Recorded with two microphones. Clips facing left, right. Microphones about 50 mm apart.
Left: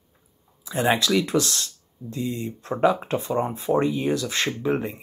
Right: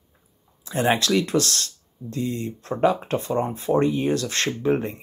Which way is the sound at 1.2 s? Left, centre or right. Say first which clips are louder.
Right 1 dB; centre.